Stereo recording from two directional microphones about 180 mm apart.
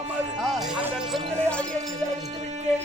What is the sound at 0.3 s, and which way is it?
Music, centre (ahead or behind).